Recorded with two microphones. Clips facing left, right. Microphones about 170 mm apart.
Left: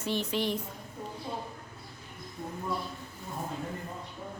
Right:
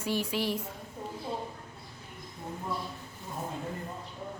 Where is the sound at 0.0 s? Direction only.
10° right (ahead or behind).